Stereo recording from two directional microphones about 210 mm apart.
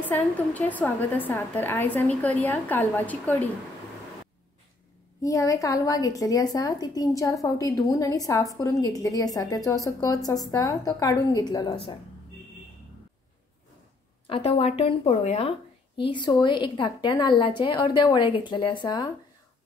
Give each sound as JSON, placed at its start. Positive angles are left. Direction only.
{"t": 0.0, "sound": "a woman's voice", "side_deg": 10}
{"t": 5.2, "sound": "a woman's voice", "side_deg": 15}
{"t": 14.2, "sound": "a woman's voice", "side_deg": 25}